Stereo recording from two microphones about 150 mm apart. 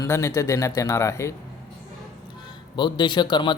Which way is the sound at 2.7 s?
30° left (ahead or behind).